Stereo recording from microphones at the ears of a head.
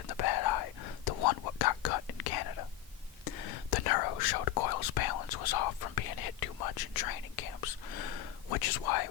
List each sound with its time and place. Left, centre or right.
0.1 s whispering: left